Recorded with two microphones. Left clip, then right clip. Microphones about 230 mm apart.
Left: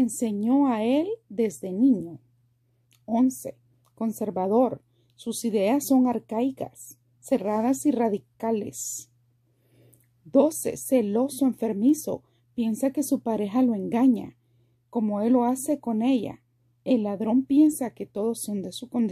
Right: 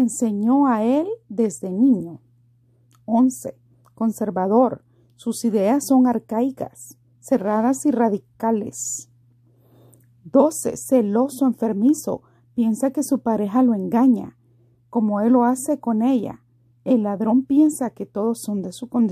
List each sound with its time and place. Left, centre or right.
0.0 s a woman's voice: right
2.9 s a sound: centre
3.8 s a woman's voice: right